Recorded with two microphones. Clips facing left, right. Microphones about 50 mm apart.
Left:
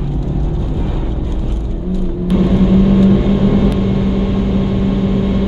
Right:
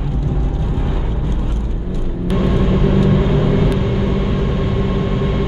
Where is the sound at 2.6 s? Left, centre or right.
Centre.